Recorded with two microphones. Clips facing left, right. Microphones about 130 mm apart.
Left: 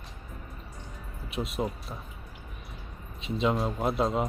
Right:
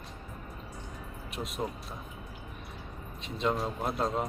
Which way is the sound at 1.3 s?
Centre (ahead or behind).